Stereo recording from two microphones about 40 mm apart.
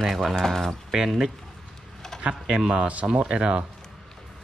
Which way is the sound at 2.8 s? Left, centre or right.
Right.